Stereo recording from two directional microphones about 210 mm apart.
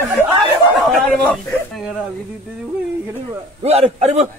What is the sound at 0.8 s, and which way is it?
A man's voice, centre (ahead or behind).